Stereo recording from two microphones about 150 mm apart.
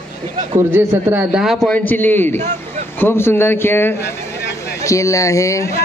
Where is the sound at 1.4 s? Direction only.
5° left (ahead or behind); by 5.7 s 20° left (ahead or behind).